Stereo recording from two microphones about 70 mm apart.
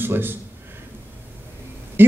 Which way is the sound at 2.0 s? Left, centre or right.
Right.